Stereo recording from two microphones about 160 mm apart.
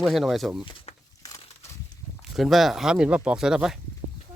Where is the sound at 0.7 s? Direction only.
30° left (ahead or behind).